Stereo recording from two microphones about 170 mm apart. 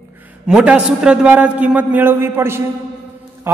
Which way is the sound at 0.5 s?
5° right (ahead or behind).